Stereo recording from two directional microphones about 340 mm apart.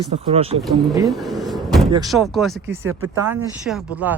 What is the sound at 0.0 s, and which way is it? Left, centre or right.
Speech, centre.